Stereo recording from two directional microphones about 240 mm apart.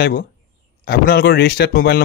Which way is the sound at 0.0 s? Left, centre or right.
Left.